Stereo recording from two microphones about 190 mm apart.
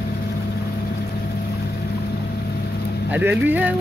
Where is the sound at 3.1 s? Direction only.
10° right (ahead or behind).